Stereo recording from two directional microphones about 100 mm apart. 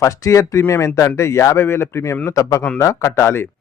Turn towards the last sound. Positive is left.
turn(degrees=25)  # may be behind; listen again after turning